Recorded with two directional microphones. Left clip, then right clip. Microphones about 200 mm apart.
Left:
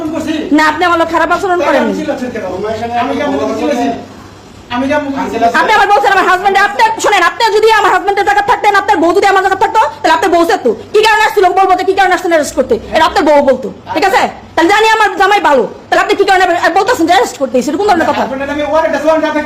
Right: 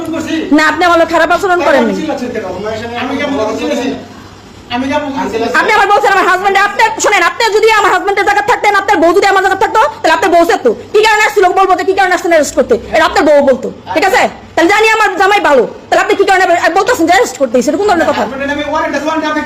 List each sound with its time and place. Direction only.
0.5 s speech: 20° right (ahead or behind)
5.5 s a woman's voice: 5° right (ahead or behind)